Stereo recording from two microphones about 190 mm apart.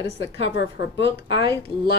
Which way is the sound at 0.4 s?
65° left (ahead or behind).